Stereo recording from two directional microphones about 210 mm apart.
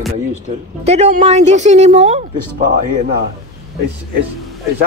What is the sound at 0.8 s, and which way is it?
A woman's voice, 30° right (ahead or behind).